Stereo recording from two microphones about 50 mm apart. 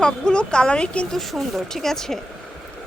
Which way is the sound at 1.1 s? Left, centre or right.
Centre.